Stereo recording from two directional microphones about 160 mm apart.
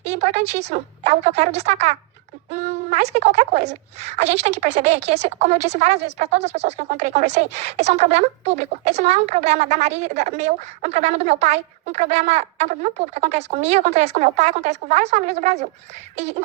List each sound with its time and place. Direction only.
0.0 s speech: 45° right (ahead or behind)